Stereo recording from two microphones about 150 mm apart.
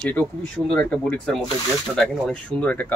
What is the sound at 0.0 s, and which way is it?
Speech, 10° left (ahead or behind).